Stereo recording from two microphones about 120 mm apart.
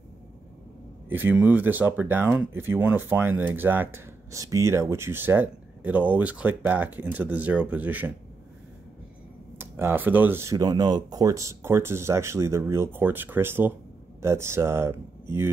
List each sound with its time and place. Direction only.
1.0 s speech: 15° right (ahead or behind)
9.6 s speech: 20° right (ahead or behind)